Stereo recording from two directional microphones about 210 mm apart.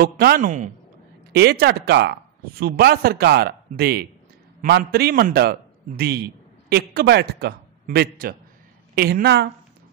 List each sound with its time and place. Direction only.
0.0 s a man's voice: 45° right (ahead or behind)
1.3 s a man's voice: 50° right (ahead or behind)